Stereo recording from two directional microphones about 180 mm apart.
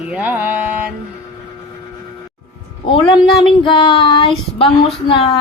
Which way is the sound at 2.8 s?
30° left (ahead or behind).